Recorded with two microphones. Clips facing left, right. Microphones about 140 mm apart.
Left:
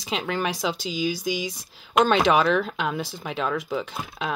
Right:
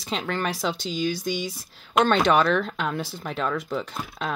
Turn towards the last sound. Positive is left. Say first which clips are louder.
# left 1 dB
turn(degrees=0)  # may be behind; listen again after turning